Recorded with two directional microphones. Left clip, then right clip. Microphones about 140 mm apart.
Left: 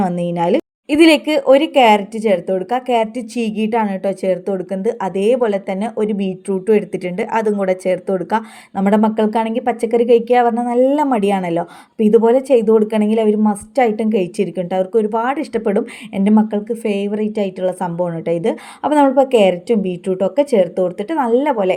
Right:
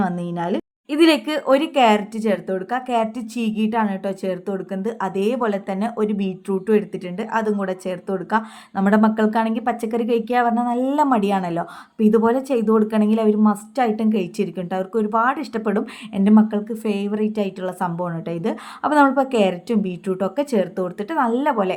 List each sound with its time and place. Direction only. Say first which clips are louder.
0.0 s a woman's voice: left 7 dB; 30° left (ahead or behind)
6.9 s a woman's voice: left 5 dB; 35° left (ahead or behind); by 21.5 s 20° left (ahead or behind)